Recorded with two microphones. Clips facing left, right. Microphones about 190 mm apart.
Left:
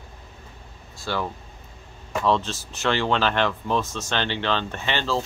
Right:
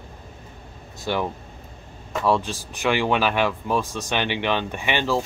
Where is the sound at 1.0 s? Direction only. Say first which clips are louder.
Right 3 dB; 20° right (ahead or behind).